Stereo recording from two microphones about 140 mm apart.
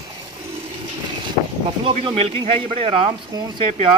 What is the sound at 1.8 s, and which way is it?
Speech, 40° right (ahead or behind).